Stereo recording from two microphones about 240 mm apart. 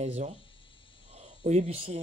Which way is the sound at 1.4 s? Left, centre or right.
Right.